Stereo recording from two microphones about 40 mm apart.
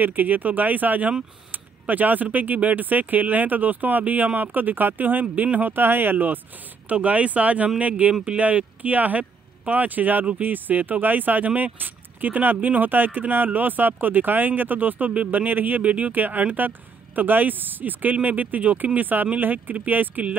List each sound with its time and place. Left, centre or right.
0.0 s speech: right
1.5 s a sound: right
2.3 s speech: right
6.9 s speech: right
15.8 s speech: right
16.1 s speech: right